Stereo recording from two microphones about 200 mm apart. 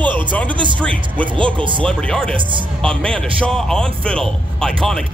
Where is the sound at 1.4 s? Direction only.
25° right (ahead or behind).